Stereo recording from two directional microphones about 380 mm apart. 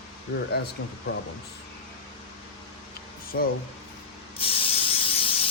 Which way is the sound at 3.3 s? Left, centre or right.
Left.